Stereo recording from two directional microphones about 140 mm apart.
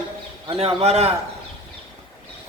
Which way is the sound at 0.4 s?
45° right (ahead or behind).